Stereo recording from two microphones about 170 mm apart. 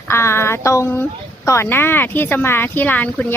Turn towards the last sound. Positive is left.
turn(degrees=10)  # may be behind; listen again after turning